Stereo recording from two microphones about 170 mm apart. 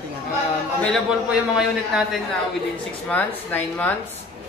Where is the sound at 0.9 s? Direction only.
5° right (ahead or behind).